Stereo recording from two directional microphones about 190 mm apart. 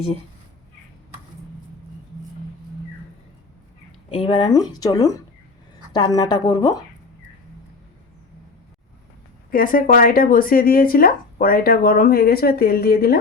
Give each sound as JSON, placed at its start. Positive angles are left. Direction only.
{"t": 4.1, "sound": "speech", "side_deg": 30}
{"t": 9.5, "sound": "speech", "side_deg": 50}